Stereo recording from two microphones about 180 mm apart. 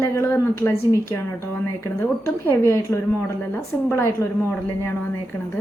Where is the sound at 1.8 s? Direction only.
15° left (ahead or behind).